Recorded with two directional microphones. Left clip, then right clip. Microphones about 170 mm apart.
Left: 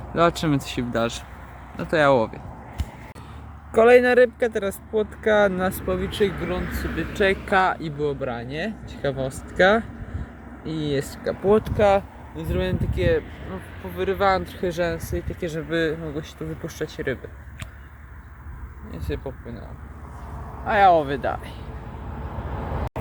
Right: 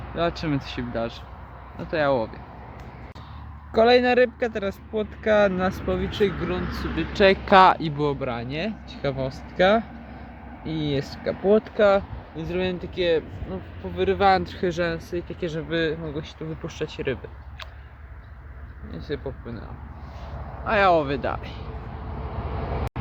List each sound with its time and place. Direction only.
0.2 s speech: 30° left (ahead or behind)
3.8 s speech: centre (ahead or behind)
6.6 s speech: 35° right (ahead or behind)
7.8 s speech: 20° right (ahead or behind); by 13.2 s 5° right (ahead or behind)
13.9 s speech: 15° right (ahead or behind)
14.8 s speech: centre (ahead or behind)
18.9 s speech: 5° right (ahead or behind)
20.7 s speech: 10° right (ahead or behind)